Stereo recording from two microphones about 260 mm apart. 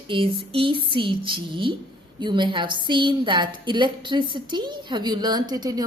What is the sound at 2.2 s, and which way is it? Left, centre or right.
A woman's voice, centre.